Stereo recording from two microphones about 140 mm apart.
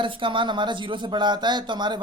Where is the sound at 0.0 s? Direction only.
35° right (ahead or behind).